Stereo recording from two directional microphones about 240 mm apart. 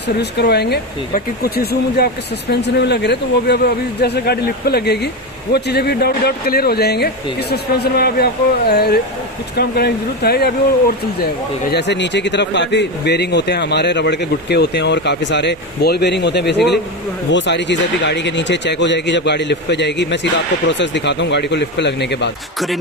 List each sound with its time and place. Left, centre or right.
0.2 s speech: left